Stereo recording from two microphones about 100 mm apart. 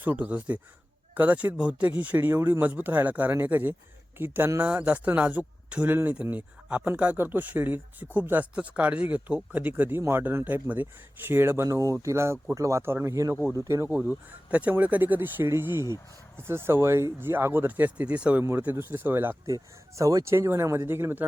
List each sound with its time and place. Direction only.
0.0 s speech: 15° right (ahead or behind)
13.9 s speech: 15° right (ahead or behind)
19.5 s speech: 35° right (ahead or behind)